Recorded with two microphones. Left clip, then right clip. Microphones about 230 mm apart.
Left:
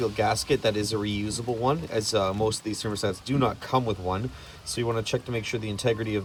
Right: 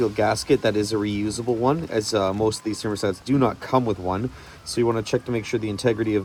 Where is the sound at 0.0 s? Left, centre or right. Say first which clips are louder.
Right 4 dB; right.